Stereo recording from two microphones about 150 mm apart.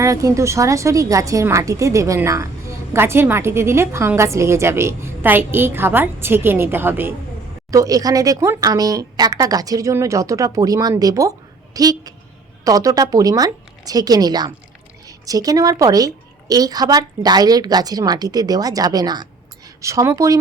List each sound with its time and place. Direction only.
0.0 s a woman's voice: 20° right (ahead or behind)